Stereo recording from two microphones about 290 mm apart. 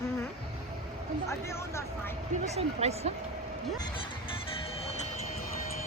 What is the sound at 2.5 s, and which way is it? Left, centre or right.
Speech, right.